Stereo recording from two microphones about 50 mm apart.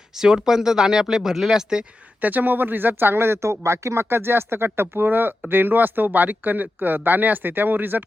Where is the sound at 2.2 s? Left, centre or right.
Right.